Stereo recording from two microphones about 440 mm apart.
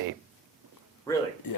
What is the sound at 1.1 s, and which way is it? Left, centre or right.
Speech, centre.